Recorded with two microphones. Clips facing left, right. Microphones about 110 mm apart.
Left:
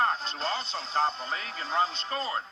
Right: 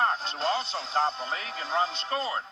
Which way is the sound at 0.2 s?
15° right (ahead or behind).